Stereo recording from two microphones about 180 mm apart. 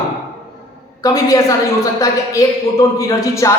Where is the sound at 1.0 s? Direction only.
20° left (ahead or behind).